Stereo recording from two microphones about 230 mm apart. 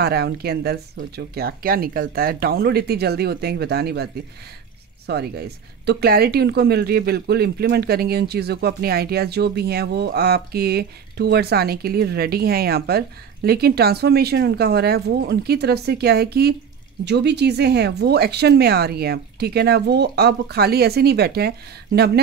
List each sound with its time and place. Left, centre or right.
0.0 s speech: right